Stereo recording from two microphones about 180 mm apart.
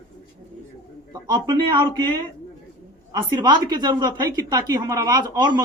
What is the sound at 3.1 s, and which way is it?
Speech, 25° right (ahead or behind).